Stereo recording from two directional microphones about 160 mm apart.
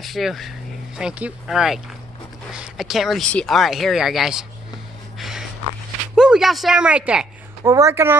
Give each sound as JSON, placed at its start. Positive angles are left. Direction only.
{"t": 0.0, "sound": "speech", "side_deg": 0}
{"t": 5.2, "sound": "a sound", "side_deg": 0}
{"t": 7.7, "sound": "speech", "side_deg": -15}